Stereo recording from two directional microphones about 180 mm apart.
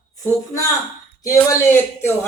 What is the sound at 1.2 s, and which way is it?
Speech, 15° left (ahead or behind).